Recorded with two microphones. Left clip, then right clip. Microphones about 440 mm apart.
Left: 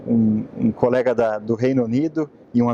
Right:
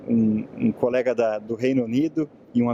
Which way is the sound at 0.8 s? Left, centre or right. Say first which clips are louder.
Left 4 dB; left.